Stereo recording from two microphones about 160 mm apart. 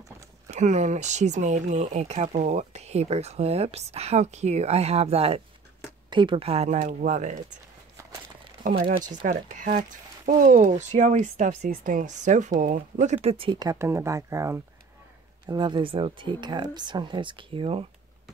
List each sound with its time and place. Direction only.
0.5 s speech: 45° right (ahead or behind)
8.6 s speech: 65° right (ahead or behind)
9.1 s speech: 55° right (ahead or behind); by 17.8 s 35° right (ahead or behind)